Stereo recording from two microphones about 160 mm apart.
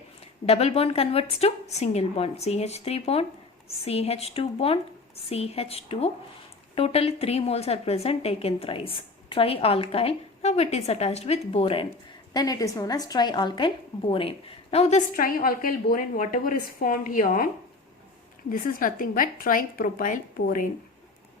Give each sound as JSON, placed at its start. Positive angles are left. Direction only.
{"t": 0.4, "sound": "a woman's voice", "side_deg": 40}
{"t": 12.3, "sound": "a woman's voice", "side_deg": 25}
{"t": 15.1, "sound": "a woman's voice", "side_deg": 60}